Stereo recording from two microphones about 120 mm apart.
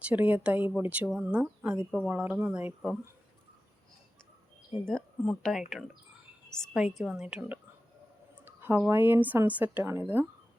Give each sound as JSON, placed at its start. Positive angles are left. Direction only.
{"t": 0.1, "sound": "speech", "side_deg": -15}
{"t": 4.9, "sound": "speech", "side_deg": 5}
{"t": 8.4, "sound": "a sound", "side_deg": -15}
{"t": 8.9, "sound": "speech", "side_deg": -20}